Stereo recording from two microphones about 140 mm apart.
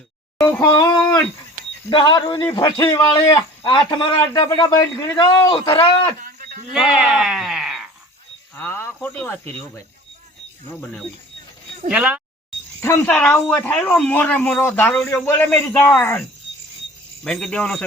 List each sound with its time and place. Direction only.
0.3 s a sound: 10° left (ahead or behind)
0.6 s a man's voice: 30° left (ahead or behind)
3.1 s a man's voice: 30° left (ahead or behind)
5.1 s a man's voice: 35° left (ahead or behind)
6.1 s a sound: 85° right
6.7 s speech: 5° right (ahead or behind)
8.5 s a man's voice: 15° left (ahead or behind)
11.9 s speech: 10° right (ahead or behind)
13.1 s a man's voice: 10° left (ahead or behind)
17.2 s speech: 5° left (ahead or behind)